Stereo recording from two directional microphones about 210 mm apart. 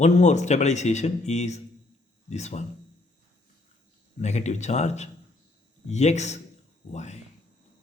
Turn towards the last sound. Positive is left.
turn(degrees=35)  # may be behind; listen again after turning